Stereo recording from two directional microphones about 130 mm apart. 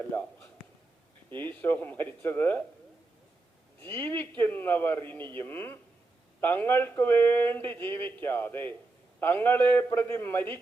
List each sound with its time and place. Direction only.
1.3 s speech: 15° left (ahead or behind)
3.9 s speech: 15° left (ahead or behind)